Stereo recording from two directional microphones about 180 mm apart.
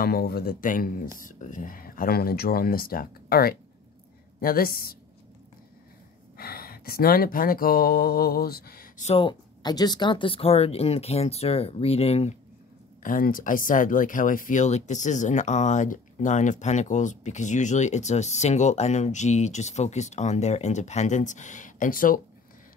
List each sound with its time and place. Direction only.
0.0 s speech: 60° left (ahead or behind)
6.3 s speech: 55° left (ahead or behind)
9.0 s speech: 30° left (ahead or behind)
13.0 s speech: 50° left (ahead or behind)